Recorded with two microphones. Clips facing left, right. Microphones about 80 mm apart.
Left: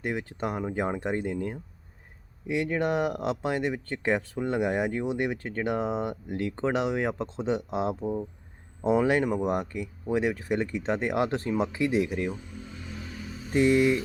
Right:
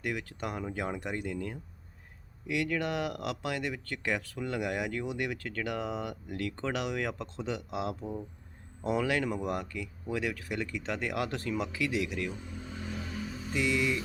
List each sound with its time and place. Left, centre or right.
0.0 s speech: left
13.5 s speech: left